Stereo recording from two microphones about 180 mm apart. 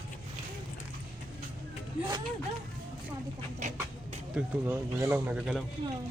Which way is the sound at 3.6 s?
45° right (ahead or behind).